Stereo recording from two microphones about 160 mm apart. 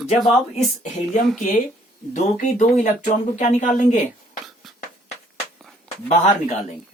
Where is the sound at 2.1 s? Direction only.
50° left (ahead or behind).